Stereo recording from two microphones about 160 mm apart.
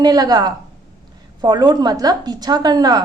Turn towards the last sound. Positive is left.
turn(degrees=-25)  # may be behind; listen again after turning